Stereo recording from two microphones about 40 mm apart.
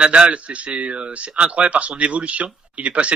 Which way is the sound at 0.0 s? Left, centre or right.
Right.